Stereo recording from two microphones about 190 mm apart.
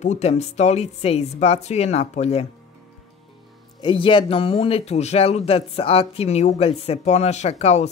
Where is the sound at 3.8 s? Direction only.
25° left (ahead or behind).